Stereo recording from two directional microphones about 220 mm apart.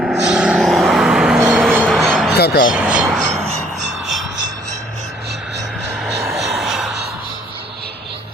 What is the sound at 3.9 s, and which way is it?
Music, centre (ahead or behind).